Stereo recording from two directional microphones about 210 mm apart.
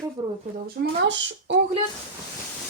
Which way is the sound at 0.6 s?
60° right (ahead or behind).